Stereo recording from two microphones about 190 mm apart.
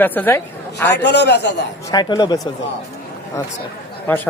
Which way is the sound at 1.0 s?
60° left (ahead or behind).